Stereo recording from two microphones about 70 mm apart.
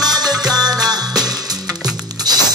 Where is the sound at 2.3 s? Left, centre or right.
Right.